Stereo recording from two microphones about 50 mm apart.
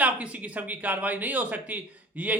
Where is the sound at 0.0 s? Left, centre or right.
Right.